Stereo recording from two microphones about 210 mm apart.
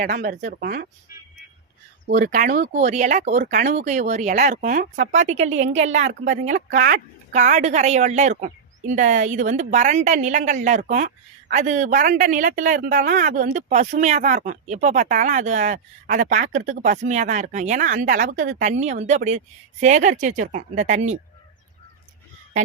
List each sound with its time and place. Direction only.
0.0 s speech: 40° right (ahead or behind)
2.0 s speech: 40° right (ahead or behind)
3.3 s speech: 50° right (ahead or behind)
3.6 s speech: 35° right (ahead or behind)
22.5 s speech: 35° right (ahead or behind)